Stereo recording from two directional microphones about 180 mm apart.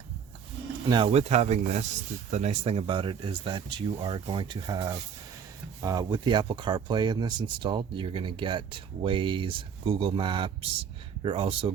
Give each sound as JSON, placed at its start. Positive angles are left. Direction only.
{"t": 0.9, "sound": "speech", "side_deg": -25}